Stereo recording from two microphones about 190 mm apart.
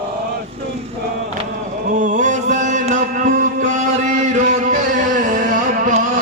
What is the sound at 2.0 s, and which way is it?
Chant, 40° right (ahead or behind).